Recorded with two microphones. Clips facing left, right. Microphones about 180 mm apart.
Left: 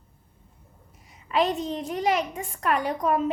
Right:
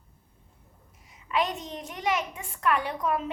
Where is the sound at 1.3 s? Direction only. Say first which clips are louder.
Left 5 dB; 35° left (ahead or behind).